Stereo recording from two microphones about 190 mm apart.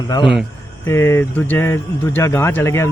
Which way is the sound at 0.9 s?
15° left (ahead or behind).